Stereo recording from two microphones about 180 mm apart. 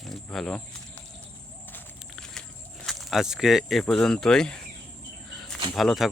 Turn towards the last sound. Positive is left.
turn(degrees=0)  # may be behind; listen again after turning